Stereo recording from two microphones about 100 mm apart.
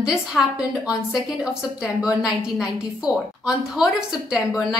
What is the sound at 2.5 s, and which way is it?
A woman's voice, 5° right (ahead or behind).